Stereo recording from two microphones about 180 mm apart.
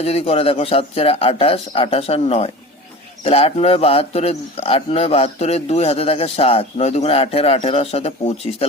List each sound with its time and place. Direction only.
0.0 s a man's voice: 35° left (ahead or behind)